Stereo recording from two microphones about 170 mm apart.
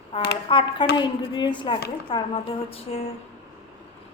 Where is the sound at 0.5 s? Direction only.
30° left (ahead or behind).